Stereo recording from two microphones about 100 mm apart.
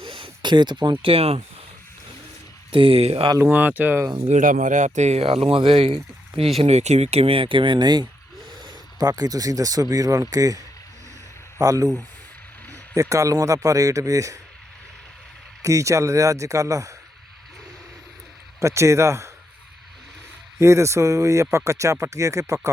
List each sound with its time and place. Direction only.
0.0 s a sound: 55° right (ahead or behind)
1.0 s speech: 80° right
2.7 s speech: 65° right (ahead or behind)
3.3 s speech: 20° right (ahead or behind)
5.1 s speech: 75° right (ahead or behind)
6.6 s speech: 90° right; by 11.9 s 35° right (ahead or behind)
12.9 s speech: 35° right (ahead or behind)
15.6 s speech: 30° right (ahead or behind)
18.6 s speech: 30° right (ahead or behind)
20.6 s speech: 30° right (ahead or behind)